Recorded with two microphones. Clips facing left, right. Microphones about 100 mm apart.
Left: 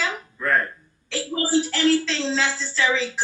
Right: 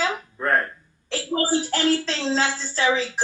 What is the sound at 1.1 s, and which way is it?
A woman's voice, 50° right (ahead or behind).